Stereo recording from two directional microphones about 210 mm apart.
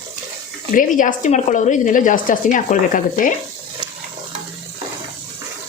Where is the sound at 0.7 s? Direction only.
40° left (ahead or behind).